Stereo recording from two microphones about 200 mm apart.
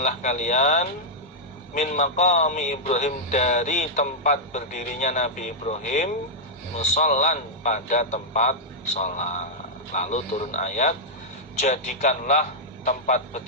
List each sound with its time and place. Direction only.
0.0 s a man's voice: 40° left (ahead or behind)